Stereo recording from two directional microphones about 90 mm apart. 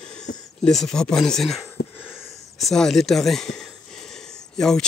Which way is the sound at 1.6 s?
20° left (ahead or behind).